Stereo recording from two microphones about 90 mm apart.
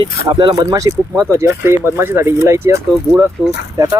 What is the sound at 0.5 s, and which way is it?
Speech, 45° right (ahead or behind).